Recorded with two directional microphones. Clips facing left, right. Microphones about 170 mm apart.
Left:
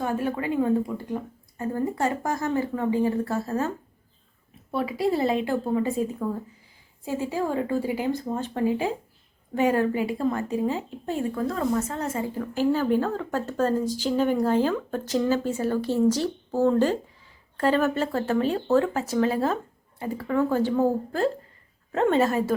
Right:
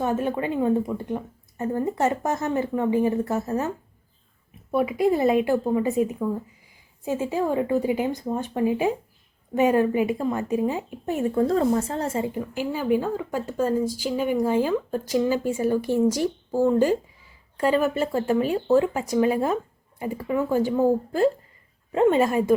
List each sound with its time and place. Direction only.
0.0 s a woman's voice: 20° right (ahead or behind)
4.7 s a woman's voice: 20° right (ahead or behind)
11.4 s a woman's voice: 30° right (ahead or behind); by 22.5 s 15° right (ahead or behind)